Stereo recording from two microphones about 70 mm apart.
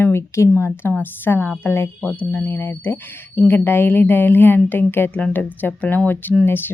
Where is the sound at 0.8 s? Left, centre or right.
Left.